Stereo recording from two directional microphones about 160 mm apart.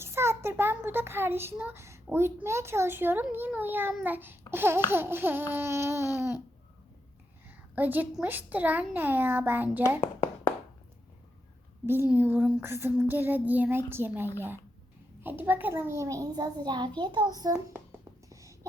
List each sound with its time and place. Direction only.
0.0 s a child's voice: 15° right (ahead or behind)
7.4 s a woman's voice: 10° right (ahead or behind)
11.9 s a woman's voice: 10° right (ahead or behind)
18.3 s a sound: 20° right (ahead or behind)